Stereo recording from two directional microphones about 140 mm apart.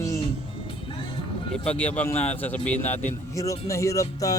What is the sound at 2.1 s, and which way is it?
Speech, 50° left (ahead or behind).